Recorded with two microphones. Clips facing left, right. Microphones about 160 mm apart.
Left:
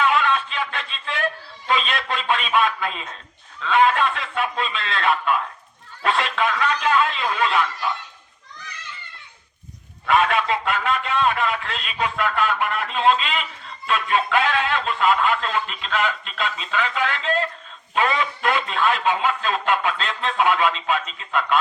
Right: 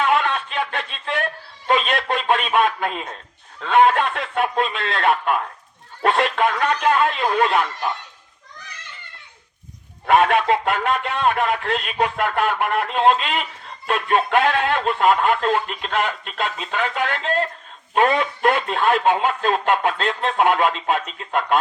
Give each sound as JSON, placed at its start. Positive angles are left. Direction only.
{"t": 0.0, "sound": "a sound", "side_deg": -50}
{"t": 3.6, "sound": "speech", "side_deg": -50}
{"t": 10.1, "sound": "speech", "side_deg": -55}